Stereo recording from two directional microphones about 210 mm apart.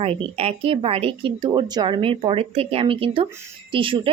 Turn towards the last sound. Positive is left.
turn(degrees=-25)  # may be behind; listen again after turning